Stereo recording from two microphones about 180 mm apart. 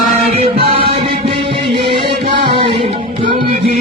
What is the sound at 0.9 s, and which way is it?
Music, 30° right (ahead or behind).